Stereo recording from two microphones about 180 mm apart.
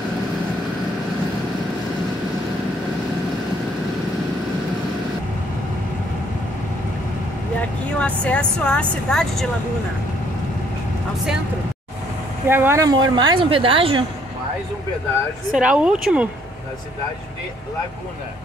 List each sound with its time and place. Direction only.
8.0 s a woman's voice: 5° left (ahead or behind)
12.4 s speech: 10° right (ahead or behind); by 14.0 s 30° right (ahead or behind)
15.5 s a woman's voice: 5° right (ahead or behind)